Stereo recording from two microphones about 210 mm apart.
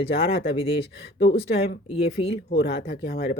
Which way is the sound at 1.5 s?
45° left (ahead or behind).